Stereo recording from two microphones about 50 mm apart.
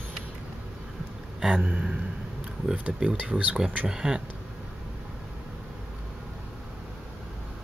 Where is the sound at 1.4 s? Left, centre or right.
Centre.